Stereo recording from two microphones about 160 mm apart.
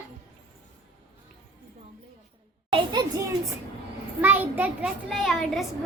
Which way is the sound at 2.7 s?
30° right (ahead or behind).